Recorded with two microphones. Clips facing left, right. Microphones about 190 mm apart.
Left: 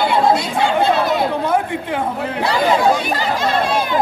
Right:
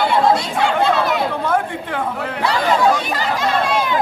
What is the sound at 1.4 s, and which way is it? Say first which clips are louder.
Speech: left 1 dB; 15° left (ahead or behind).